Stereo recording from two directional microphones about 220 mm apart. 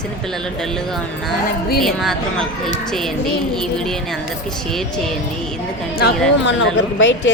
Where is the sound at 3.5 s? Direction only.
Centre (ahead or behind).